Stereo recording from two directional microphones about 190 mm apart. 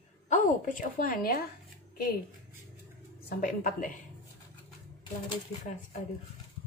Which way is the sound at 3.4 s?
45° left (ahead or behind).